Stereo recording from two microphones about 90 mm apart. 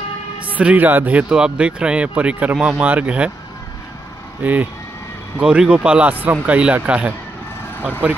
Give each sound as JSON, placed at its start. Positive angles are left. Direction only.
{"t": 0.5, "sound": "speech", "side_deg": -15}
{"t": 4.4, "sound": "speech", "side_deg": -20}